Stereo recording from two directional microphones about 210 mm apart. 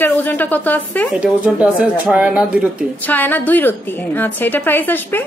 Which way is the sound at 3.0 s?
10° left (ahead or behind).